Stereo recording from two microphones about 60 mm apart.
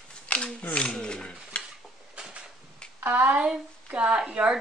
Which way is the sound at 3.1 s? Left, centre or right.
Centre.